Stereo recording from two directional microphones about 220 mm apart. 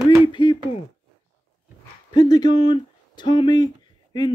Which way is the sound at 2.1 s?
20° left (ahead or behind).